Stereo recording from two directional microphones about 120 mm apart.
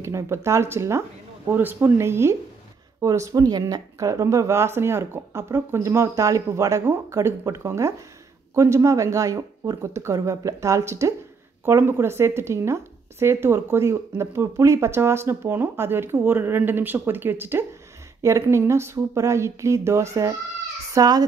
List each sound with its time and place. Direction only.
0.0 s a child's voice: 20° right (ahead or behind)